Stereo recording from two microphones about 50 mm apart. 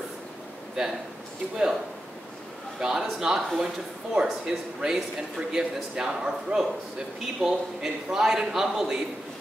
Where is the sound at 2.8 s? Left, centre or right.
Centre.